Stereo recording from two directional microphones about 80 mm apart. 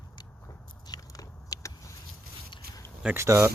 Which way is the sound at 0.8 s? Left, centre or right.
Left.